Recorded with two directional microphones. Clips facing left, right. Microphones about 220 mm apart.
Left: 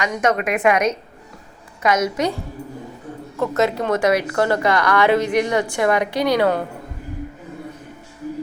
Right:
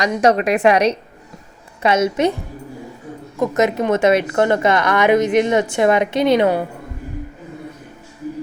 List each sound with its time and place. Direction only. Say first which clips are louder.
0.0 s a woman's voice: right 5 dB; 35° right (ahead or behind)
3.3 s a woman's voice: right 2 dB; 15° right (ahead or behind)